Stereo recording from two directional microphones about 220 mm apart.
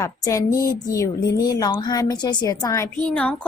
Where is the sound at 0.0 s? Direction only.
15° left (ahead or behind).